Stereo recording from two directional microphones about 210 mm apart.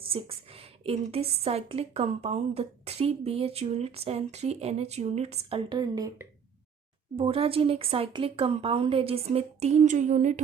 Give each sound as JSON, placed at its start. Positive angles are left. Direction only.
{"t": 0.1, "sound": "a woman's voice", "side_deg": -25}
{"t": 7.2, "sound": "a woman's voice", "side_deg": -25}